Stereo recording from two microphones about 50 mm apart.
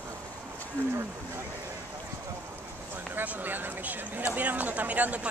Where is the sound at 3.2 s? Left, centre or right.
Right.